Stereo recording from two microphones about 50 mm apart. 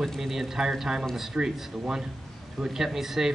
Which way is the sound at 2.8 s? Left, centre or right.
Centre.